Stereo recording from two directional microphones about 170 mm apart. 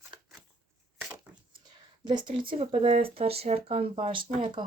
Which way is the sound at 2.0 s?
25° right (ahead or behind).